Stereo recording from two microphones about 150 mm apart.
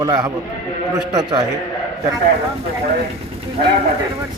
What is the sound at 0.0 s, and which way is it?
Speech, 25° right (ahead or behind).